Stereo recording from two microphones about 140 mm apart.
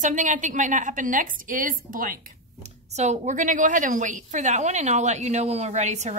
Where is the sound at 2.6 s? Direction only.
55° right (ahead or behind).